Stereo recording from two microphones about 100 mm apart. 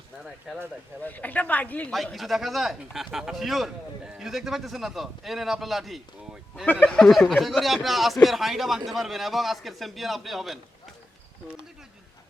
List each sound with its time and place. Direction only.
0.5 s speech: 5° right (ahead or behind)
1.0 s a woman's voice: 15° left (ahead or behind)
2.1 s speech: centre (ahead or behind)
6.7 s speech: 15° left (ahead or behind)